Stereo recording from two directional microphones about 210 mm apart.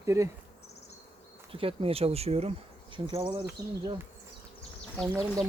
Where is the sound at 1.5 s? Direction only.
25° right (ahead or behind).